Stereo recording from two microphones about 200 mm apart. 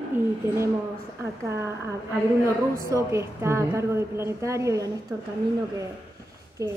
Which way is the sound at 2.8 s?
15° right (ahead or behind).